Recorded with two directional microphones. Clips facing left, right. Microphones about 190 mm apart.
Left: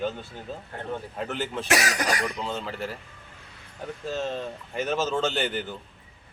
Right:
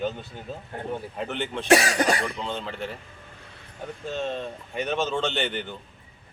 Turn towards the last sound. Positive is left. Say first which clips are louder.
# left 1 dB
turn(degrees=5)  # may be behind; listen again after turning